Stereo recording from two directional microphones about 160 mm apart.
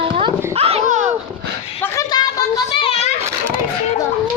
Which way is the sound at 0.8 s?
50° right (ahead or behind).